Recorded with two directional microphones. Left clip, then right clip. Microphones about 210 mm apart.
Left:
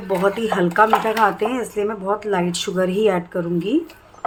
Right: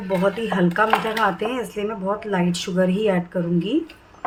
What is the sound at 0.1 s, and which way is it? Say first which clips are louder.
Speech: left 2 dB; 15° left (ahead or behind).